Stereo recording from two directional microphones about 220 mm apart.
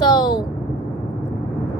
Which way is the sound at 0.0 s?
20° left (ahead or behind).